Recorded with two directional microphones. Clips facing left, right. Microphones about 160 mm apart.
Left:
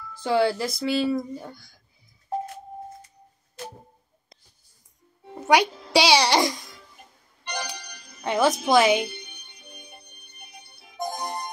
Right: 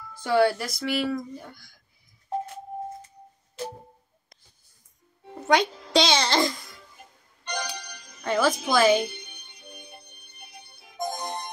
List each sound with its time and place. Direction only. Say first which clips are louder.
0.2 s speech: even; 25° left (ahead or behind)
5.3 s a child's voice: left 2 dB; 10° left (ahead or behind)
7.4 s music: right 1 dB; 10° left (ahead or behind)
8.3 s speech: left 3 dB; 20° left (ahead or behind)
9.7 s music: right 2 dB; 10° left (ahead or behind)